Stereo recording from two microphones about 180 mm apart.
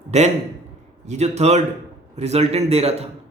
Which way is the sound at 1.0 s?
40° right (ahead or behind).